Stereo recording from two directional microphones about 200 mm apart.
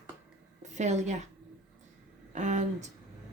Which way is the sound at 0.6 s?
35° right (ahead or behind).